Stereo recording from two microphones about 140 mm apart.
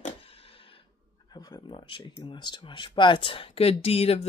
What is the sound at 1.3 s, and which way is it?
Speech, 30° left (ahead or behind).